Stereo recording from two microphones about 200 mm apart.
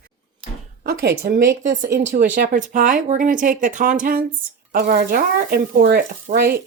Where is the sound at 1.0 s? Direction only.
50° right (ahead or behind).